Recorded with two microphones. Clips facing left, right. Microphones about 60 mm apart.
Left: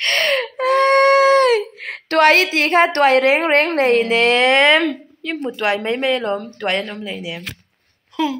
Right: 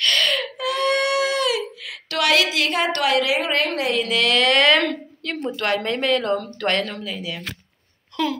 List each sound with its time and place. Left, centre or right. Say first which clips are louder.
0.0 s a sound: left 3 dB; left
1.6 s a woman's voice: left 5 dB; left
4.8 s a woman's voice: left 3 dB; centre
6.1 s a woman's voice: left 1 dB; left